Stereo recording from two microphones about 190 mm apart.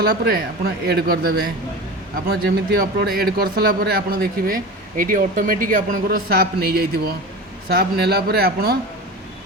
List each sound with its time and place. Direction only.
0.0 s a man's voice: 55° right (ahead or behind)
2.7 s a man's voice: 55° right (ahead or behind)